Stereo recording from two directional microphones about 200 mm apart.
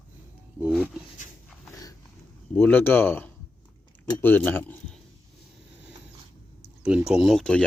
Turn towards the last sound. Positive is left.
turn(degrees=0)  # may be behind; listen again after turning